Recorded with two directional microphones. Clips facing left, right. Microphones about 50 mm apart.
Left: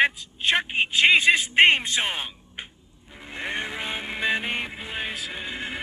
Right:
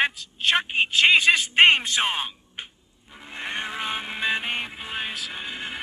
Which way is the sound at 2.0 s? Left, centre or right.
Centre.